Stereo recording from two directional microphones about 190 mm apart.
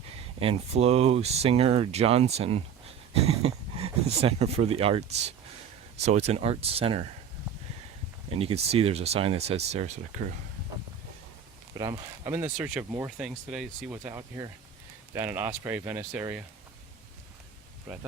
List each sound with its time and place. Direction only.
0.3 s speech: 30° right (ahead or behind)
6.1 s speech: 35° right (ahead or behind)
8.3 s speech: 30° right (ahead or behind)
11.7 s speech: 20° right (ahead or behind)
14.1 s speech: 20° right (ahead or behind)